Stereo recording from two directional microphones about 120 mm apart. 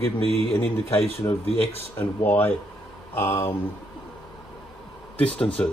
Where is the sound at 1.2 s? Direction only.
30° left (ahead or behind).